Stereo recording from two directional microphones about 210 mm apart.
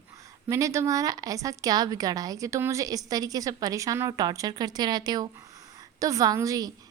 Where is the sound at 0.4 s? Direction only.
15° right (ahead or behind).